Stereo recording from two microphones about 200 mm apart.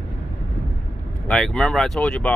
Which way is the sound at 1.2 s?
5° left (ahead or behind).